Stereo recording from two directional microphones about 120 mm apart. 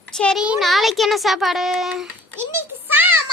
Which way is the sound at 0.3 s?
10° right (ahead or behind).